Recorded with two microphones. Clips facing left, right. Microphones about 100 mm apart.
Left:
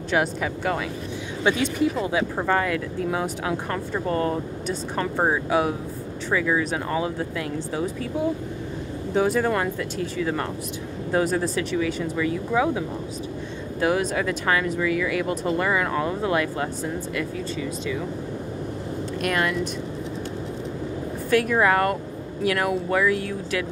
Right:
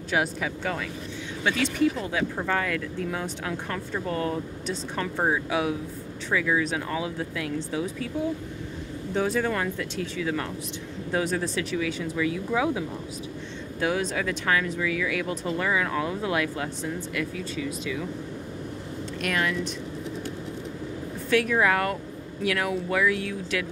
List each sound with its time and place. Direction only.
0.1 s speech: centre (ahead or behind)
1.4 s speech: 20° left (ahead or behind); by 7.6 s centre (ahead or behind)
9.1 s speech: 5° left (ahead or behind)
19.2 s speech: 5° left (ahead or behind)
21.3 s speech: centre (ahead or behind)